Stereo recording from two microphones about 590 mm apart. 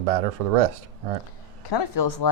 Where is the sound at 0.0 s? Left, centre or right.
Right.